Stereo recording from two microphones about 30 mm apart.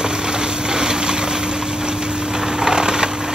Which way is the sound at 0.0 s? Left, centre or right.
Right.